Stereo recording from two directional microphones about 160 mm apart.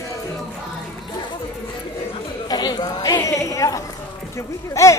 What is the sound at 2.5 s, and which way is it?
A woman's voice, 25° left (ahead or behind).